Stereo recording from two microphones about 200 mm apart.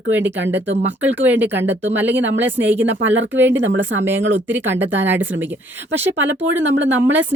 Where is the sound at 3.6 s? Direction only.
70° right (ahead or behind).